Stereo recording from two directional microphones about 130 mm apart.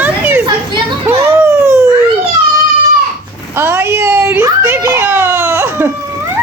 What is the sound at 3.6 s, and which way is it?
A child's voice, 15° right (ahead or behind).